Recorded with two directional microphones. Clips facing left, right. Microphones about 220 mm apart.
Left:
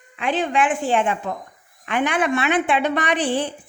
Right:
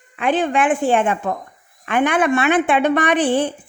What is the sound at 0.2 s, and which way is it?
A woman's voice, 50° right (ahead or behind).